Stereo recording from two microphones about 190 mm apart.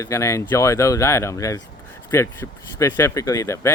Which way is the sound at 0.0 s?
15° left (ahead or behind).